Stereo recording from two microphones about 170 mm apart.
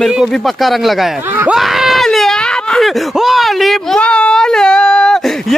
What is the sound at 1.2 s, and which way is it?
Speech, 10° right (ahead or behind).